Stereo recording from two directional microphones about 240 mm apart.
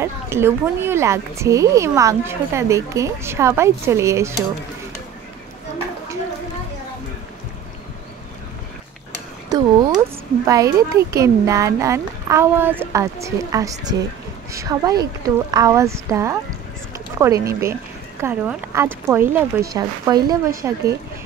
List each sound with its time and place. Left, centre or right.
0.0 s speech: centre
9.5 s a sound: centre
9.9 s speech: centre